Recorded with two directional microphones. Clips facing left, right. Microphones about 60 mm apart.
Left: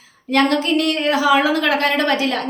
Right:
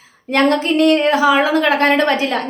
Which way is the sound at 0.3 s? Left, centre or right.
Right.